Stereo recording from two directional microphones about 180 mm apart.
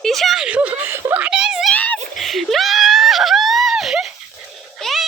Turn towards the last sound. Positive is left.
turn(degrees=0)  # may be behind; listen again after turning